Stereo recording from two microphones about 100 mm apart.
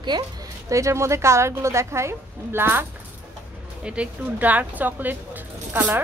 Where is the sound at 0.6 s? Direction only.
30° right (ahead or behind).